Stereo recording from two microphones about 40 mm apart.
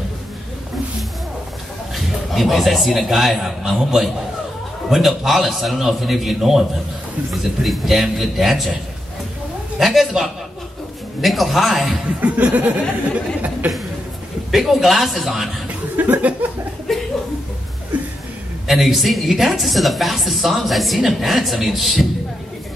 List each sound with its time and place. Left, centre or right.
2.0 s a sound: centre
3.1 s a woman's voice: centre
7.6 s a woman's voice: centre
9.8 s a man's voice: centre
12.2 s a sound: right
14.5 s a woman's voice: centre
16.0 s a sound: right
16.9 s chuckle: centre
18.7 s a woman's voice: centre